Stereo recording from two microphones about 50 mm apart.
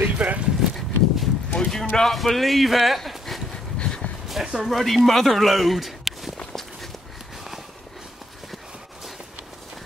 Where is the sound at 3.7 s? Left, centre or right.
Centre.